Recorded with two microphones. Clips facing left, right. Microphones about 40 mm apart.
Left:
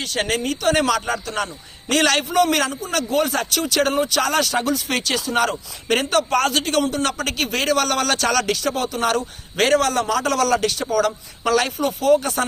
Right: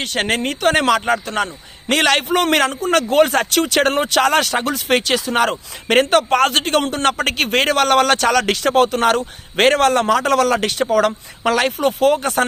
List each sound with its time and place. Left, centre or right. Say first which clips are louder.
0.0 s a man's voice: right 3 dB; right
8.4 s a man's voice: right 7 dB; right
10.1 s a man's voice: right 4 dB; right
11.9 s a man's voice: right 1 dB; right